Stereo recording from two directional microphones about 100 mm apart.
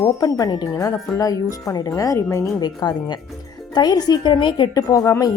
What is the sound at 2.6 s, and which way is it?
Speech, 45° left (ahead or behind).